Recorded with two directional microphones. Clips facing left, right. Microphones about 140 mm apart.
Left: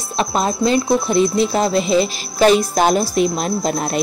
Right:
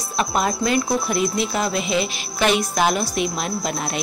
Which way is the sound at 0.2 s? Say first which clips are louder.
Left 3 dB; 30° left (ahead or behind).